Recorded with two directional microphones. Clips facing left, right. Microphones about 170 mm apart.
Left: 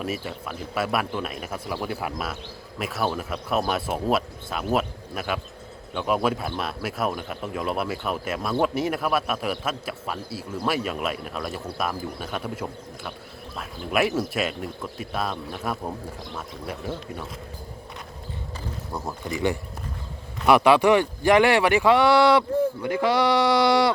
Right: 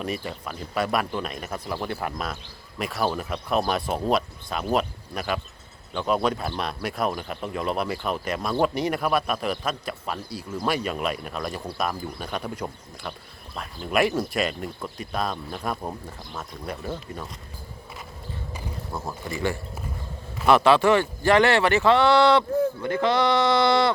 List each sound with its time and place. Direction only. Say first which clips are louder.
0.0 s a man's voice: even; 5° left (ahead or behind)
19.3 s speech: left 3 dB; 20° left (ahead or behind)